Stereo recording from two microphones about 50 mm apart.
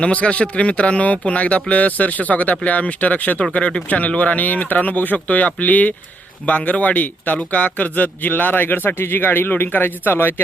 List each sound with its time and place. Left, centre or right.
0.0 s speech: left